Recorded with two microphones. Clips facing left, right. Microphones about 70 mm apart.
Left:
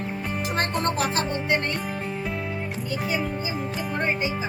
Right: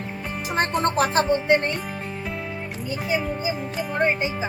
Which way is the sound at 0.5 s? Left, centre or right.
Right.